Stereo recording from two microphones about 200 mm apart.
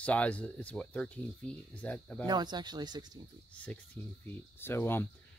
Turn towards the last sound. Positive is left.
turn(degrees=10)  # may be behind; listen again after turning